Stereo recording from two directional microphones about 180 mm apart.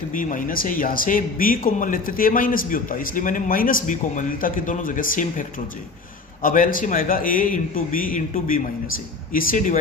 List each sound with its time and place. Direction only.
0.1 s speech: 50° left (ahead or behind)